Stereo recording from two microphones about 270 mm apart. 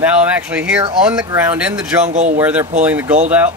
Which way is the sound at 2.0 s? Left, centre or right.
Right.